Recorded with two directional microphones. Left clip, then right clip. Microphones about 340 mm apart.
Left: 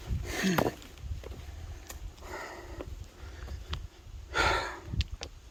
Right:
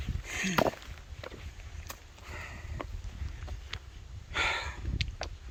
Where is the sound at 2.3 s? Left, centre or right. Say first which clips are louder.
Left 3 dB; centre.